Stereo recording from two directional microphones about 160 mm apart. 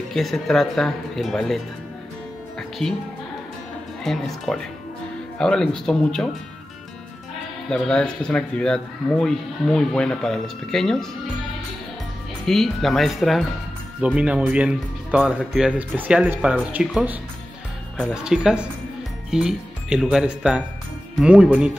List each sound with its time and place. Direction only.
0.1 s speech: centre (ahead or behind)
2.8 s speech: 5° left (ahead or behind)
4.0 s speech: 5° left (ahead or behind)
7.7 s speech: 5° left (ahead or behind)
12.4 s speech: centre (ahead or behind)